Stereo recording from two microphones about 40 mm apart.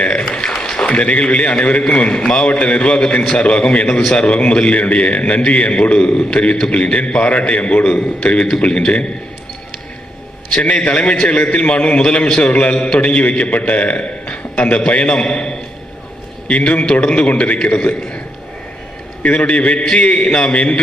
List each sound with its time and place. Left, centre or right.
0.0 s a sound: left
2.0 s a man's voice: left
2.4 s a man's voice: left
10.6 s a man's voice: left
14.0 s a sound: left
14.8 s a man's voice: left
16.5 s a man's voice: left
19.2 s a man's voice: left